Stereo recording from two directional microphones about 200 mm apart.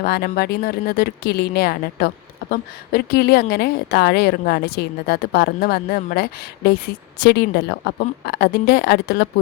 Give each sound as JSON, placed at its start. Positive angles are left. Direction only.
{"t": 0.0, "sound": "a woman's voice", "side_deg": 50}